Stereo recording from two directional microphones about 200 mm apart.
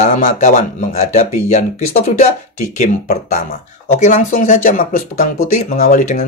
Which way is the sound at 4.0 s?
40° left (ahead or behind).